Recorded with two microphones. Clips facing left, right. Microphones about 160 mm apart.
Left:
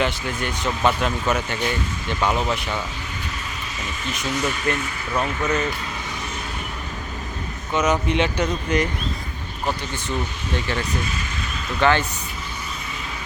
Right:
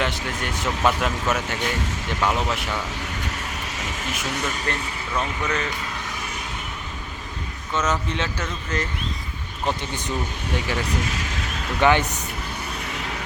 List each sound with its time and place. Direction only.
0.0 s speech: centre (ahead or behind)
3.8 s speech: 90° right
4.3 s speech: 60° right (ahead or behind)
4.6 s speech: 35° right (ahead or behind)
5.1 s speech: 10° left (ahead or behind)
7.7 s speech: 15° left (ahead or behind)
10.8 s vehicle: 85° right
11.8 s speech: 15° right (ahead or behind)